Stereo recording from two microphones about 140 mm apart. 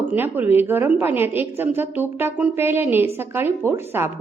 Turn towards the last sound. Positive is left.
turn(degrees=-15)  # may be behind; listen again after turning